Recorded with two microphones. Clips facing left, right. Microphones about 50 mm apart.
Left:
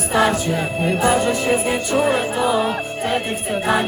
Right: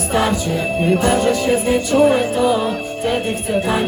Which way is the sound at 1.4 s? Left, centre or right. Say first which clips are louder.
Right 3 dB; left.